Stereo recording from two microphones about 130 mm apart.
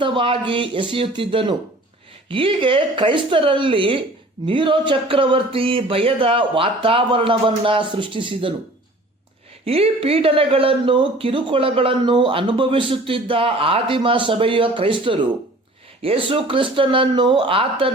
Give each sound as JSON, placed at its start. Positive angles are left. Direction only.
{"t": 0.0, "sound": "speech", "side_deg": -40}
{"t": 9.6, "sound": "speech", "side_deg": -50}